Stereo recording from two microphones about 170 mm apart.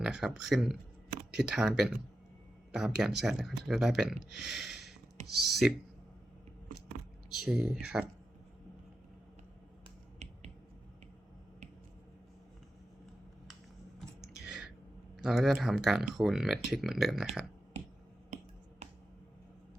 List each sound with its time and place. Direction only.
0.0 s speech: centre (ahead or behind)
7.3 s speech: 5° right (ahead or behind)
10.2 s finger snapping: 40° right (ahead or behind)
14.2 s a sound: 5° right (ahead or behind)
15.2 s speech: centre (ahead or behind)